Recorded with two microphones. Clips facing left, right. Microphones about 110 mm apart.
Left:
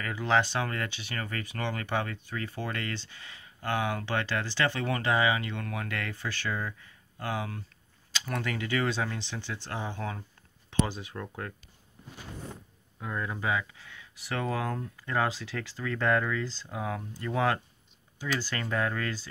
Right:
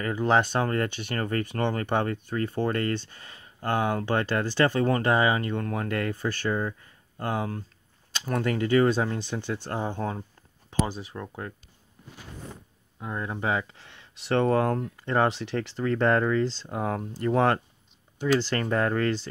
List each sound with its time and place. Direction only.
0.0 s speech: 40° right (ahead or behind)
11.1 s speech: 20° right (ahead or behind)
13.0 s speech: 25° right (ahead or behind); by 17.6 s 40° right (ahead or behind)
18.6 s speech: 40° right (ahead or behind)